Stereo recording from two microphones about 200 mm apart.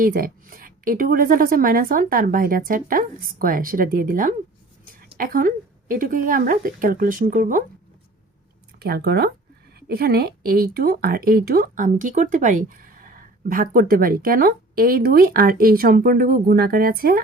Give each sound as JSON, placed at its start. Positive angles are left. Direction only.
{"t": 0.0, "sound": "speech", "side_deg": -45}
{"t": 8.8, "sound": "speech", "side_deg": -50}